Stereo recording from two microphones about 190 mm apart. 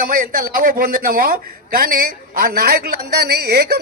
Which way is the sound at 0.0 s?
50° right (ahead or behind).